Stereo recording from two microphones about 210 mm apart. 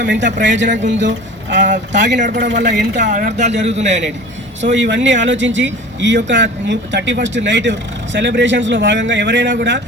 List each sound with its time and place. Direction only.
0.0 s speech: 55° right (ahead or behind)
1.6 s speech: 35° right (ahead or behind)
2.5 s speech: 55° right (ahead or behind)
3.0 s speech: 35° right (ahead or behind)
4.7 s speech: 60° right (ahead or behind)